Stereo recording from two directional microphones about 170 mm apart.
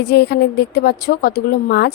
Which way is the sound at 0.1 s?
70° left (ahead or behind).